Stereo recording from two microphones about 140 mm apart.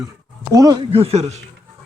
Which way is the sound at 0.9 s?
45° right (ahead or behind).